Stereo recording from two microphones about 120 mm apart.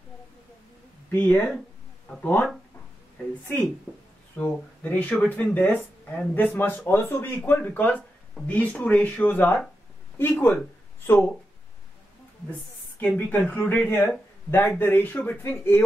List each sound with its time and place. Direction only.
1.1 s speech: 15° left (ahead or behind)
3.9 s speech: 15° left (ahead or behind)
13.0 s speech: 15° left (ahead or behind)